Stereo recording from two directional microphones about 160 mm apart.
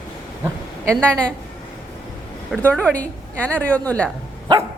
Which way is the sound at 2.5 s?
5° left (ahead or behind).